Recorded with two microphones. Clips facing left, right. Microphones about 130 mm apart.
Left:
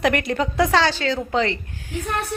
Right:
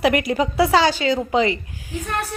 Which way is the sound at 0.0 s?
5° right (ahead or behind).